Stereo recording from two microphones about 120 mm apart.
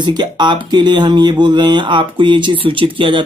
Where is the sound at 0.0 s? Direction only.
40° right (ahead or behind).